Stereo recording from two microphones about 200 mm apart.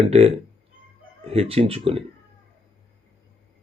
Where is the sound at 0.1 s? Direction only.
30° right (ahead or behind).